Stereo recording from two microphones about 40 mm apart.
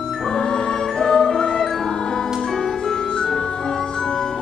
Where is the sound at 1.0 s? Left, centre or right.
Centre.